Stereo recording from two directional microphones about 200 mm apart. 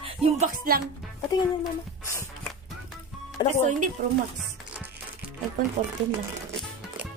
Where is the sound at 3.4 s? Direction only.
20° left (ahead or behind).